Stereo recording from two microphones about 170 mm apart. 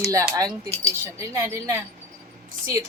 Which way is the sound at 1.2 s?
15° right (ahead or behind).